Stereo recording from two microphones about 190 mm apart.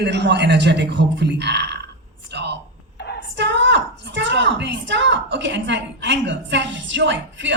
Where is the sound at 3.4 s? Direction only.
65° right (ahead or behind).